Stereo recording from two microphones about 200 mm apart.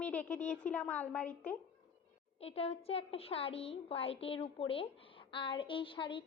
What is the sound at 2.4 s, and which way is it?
A woman's voice, 30° left (ahead or behind).